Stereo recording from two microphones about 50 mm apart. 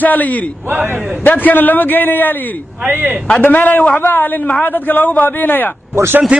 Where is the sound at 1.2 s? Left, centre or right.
Left.